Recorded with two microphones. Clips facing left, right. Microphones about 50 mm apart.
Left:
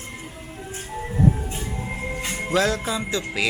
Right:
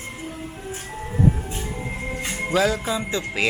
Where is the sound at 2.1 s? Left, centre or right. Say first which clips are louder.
Right 1 dB; centre.